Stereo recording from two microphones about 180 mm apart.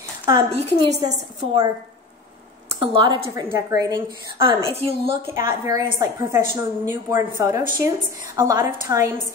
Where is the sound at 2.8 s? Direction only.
30° right (ahead or behind).